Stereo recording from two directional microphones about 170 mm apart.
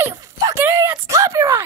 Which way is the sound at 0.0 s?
20° right (ahead or behind).